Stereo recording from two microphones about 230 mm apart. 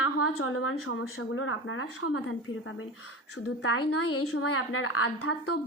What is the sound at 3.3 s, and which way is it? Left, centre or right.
A woman's voice, left.